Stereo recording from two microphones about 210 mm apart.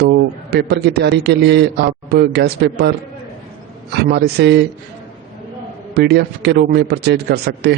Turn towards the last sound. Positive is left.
turn(degrees=-50)  # may be behind; listen again after turning